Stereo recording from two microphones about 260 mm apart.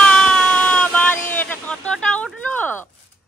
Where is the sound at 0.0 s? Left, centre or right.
Centre.